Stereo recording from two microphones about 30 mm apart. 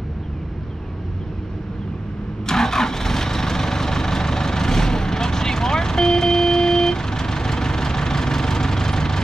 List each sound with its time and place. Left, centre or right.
2.4 s vehicle: centre